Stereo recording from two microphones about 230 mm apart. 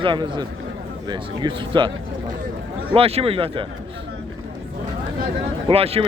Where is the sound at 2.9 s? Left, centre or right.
Right.